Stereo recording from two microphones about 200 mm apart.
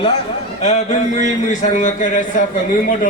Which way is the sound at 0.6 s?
35° left (ahead or behind).